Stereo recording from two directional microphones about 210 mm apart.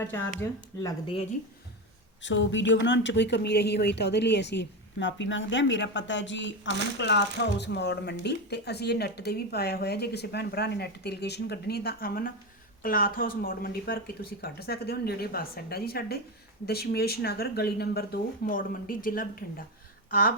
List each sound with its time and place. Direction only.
0.0 s speech: 10° left (ahead or behind)
2.2 s speech: 60° left (ahead or behind); by 19.6 s 45° left (ahead or behind)
20.1 s a sound: 40° left (ahead or behind)